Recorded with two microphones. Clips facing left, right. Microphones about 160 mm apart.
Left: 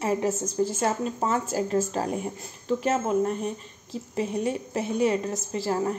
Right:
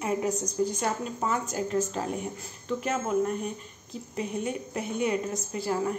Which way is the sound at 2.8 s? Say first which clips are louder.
Left 2 dB; 30° left (ahead or behind).